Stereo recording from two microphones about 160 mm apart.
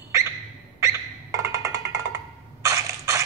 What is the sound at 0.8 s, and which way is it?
Music, 20° right (ahead or behind).